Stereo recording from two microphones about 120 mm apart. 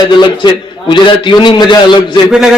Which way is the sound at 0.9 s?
40° left (ahead or behind).